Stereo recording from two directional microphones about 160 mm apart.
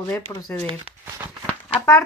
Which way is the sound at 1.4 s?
20° left (ahead or behind).